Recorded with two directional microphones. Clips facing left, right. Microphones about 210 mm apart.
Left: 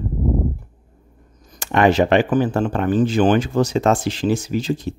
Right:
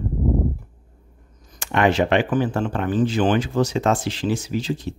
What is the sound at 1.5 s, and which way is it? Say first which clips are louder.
Speech: left 3 dB; 40° left (ahead or behind).